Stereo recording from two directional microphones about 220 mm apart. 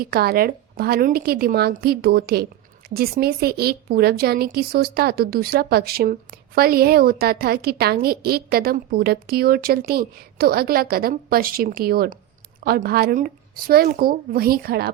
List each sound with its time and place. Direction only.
0.0 s speech: 45° right (ahead or behind)